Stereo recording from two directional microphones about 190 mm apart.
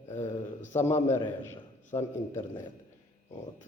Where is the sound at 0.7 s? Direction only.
10° left (ahead or behind).